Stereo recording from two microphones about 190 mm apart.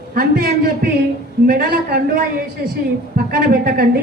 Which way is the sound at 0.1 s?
50° right (ahead or behind).